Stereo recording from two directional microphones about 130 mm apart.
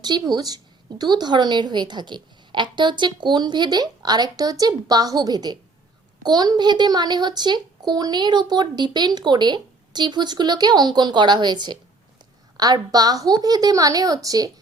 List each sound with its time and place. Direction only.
0.0 s a woman's voice: 30° right (ahead or behind)